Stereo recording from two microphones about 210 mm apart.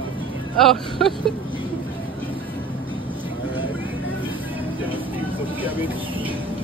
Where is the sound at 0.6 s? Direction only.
Centre (ahead or behind).